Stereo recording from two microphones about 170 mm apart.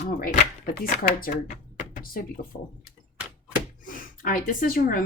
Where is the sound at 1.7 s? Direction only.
50° left (ahead or behind).